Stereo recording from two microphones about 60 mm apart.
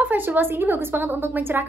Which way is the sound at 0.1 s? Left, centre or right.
Right.